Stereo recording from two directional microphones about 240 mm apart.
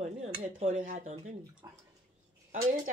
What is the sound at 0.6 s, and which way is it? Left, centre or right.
Speech, right.